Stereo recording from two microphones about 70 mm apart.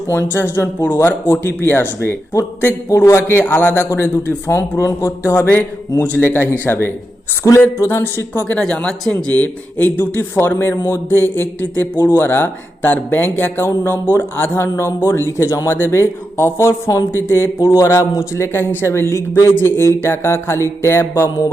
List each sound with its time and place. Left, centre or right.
0.1 s speech: left
2.9 s speech: left
8.4 s a man's voice: centre; by 17.7 s left
17.7 s speech: left
21.2 s a sound: left